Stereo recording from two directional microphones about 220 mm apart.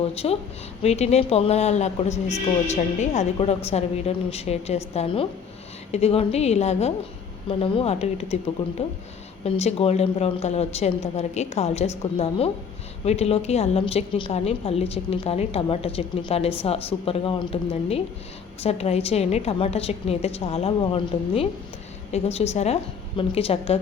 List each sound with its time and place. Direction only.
0.1 s a woman's voice: 30° left (ahead or behind)
9.4 s a woman's voice: 30° left (ahead or behind)